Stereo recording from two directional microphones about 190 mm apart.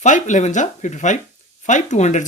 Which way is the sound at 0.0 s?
40° left (ahead or behind).